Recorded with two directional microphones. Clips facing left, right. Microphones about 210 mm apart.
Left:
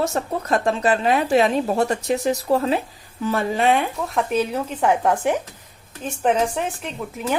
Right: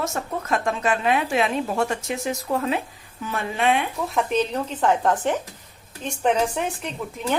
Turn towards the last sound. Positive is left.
turn(degrees=5)  # may be behind; listen again after turning